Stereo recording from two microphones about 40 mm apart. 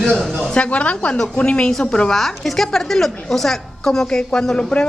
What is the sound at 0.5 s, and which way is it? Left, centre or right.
A woman's voice, left.